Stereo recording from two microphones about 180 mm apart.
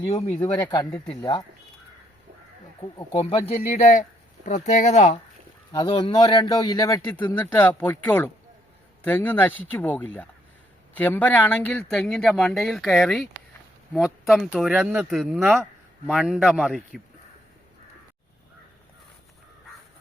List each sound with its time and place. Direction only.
0.1 s speech: 35° left (ahead or behind)
0.3 s speech: 20° left (ahead or behind)
3.1 s speech: 30° left (ahead or behind)
3.7 s speech: 45° left (ahead or behind)
5.7 s speech: 25° left (ahead or behind); by 17.0 s 5° right (ahead or behind)